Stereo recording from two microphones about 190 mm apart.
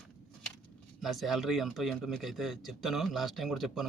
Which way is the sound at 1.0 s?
Centre (ahead or behind).